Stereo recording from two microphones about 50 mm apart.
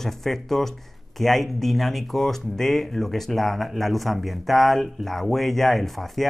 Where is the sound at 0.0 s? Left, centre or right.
Centre.